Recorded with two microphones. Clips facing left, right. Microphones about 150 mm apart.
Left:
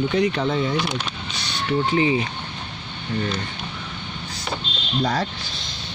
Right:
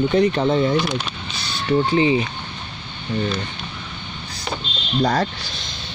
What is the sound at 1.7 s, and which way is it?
Speech, 30° right (ahead or behind).